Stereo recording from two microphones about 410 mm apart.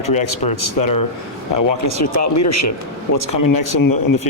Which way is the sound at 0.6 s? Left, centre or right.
Left.